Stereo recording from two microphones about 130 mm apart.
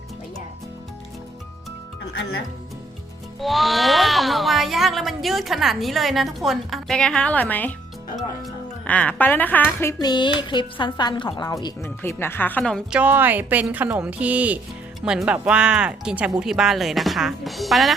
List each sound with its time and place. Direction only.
3.4 s speech: centre (ahead or behind)
8.9 s speech: 10° left (ahead or behind)
10.0 s a woman's voice: 35° left (ahead or behind); by 12.8 s 10° left (ahead or behind)
12.9 s speech: 10° right (ahead or behind)